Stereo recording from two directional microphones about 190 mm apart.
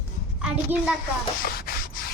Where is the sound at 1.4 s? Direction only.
55° left (ahead or behind).